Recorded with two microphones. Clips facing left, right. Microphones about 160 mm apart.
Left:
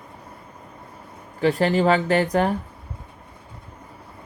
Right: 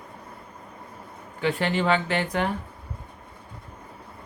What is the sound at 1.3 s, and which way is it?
Speech, 40° left (ahead or behind).